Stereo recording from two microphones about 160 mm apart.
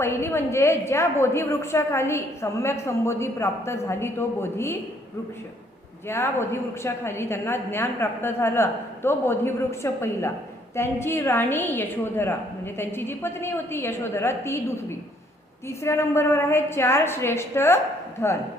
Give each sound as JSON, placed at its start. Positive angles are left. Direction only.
{"t": 0.0, "sound": "a woman's voice", "side_deg": 15}
{"t": 6.1, "sound": "a woman's voice", "side_deg": 15}